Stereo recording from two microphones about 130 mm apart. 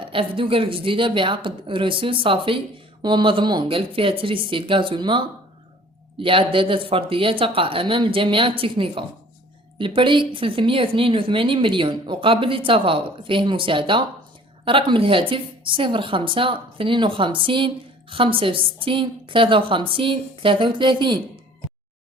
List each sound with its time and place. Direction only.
0.0 s a woman's voice: 40° right (ahead or behind)